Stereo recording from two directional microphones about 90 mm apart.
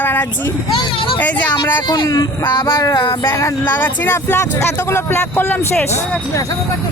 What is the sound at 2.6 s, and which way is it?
Music, 35° left (ahead or behind).